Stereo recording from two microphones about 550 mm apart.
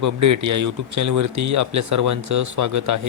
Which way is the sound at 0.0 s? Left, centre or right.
Right.